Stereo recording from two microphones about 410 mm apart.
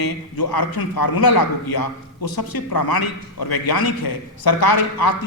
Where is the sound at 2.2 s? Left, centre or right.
Left.